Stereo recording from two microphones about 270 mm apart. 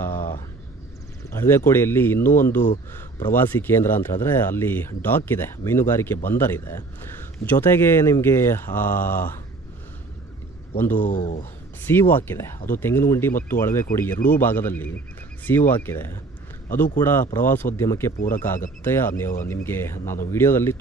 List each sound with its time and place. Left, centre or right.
0.0 s a sound: centre
1.3 s speech: centre
11.0 s speech: left
11.8 s speech: centre